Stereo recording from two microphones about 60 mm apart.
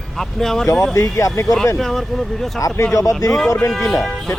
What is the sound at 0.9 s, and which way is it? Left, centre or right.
Speech, left.